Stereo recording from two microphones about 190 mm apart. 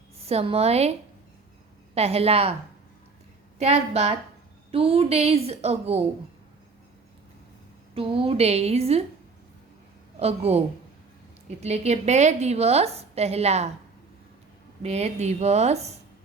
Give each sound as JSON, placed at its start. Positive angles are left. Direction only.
{"t": 0.2, "sound": "a woman's voice", "side_deg": -30}
{"t": 2.0, "sound": "a woman's voice", "side_deg": -30}
{"t": 3.6, "sound": "a woman's voice", "side_deg": -35}
{"t": 7.9, "sound": "a woman's voice", "side_deg": -30}
{"t": 10.2, "sound": "a woman's voice", "side_deg": -35}
{"t": 14.8, "sound": "a woman's voice", "side_deg": -35}